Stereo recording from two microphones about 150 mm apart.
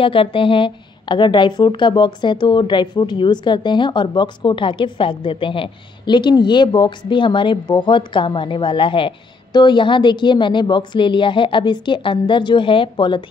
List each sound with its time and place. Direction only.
0.0 s a woman's voice: 35° left (ahead or behind)